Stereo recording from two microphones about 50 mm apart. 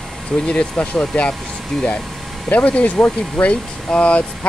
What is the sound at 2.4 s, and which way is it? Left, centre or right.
Speech, left.